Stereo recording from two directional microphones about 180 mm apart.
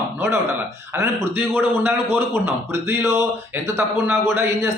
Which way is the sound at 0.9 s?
15° right (ahead or behind).